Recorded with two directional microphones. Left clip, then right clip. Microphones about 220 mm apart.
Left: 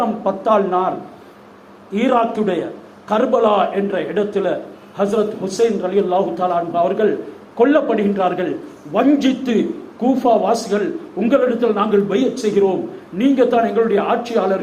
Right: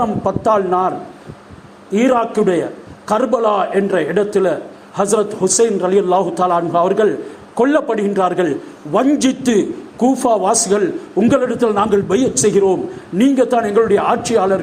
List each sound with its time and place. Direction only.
0.0 s a man's voice: 45° right (ahead or behind)